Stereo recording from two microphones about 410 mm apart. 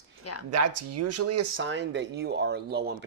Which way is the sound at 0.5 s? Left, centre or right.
Right.